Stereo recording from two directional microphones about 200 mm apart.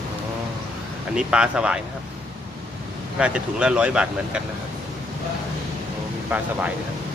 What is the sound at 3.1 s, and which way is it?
Speech, 5° right (ahead or behind).